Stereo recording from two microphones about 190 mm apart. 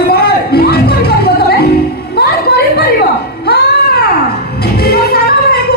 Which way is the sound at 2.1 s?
55° left (ahead or behind).